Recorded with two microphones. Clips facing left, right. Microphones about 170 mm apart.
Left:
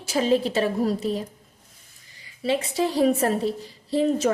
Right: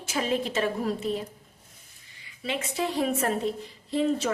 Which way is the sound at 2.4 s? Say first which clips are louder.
Left 6 dB; 35° left (ahead or behind).